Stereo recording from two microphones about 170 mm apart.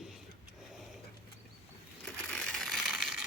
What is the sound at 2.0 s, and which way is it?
Crushing, 5° left (ahead or behind).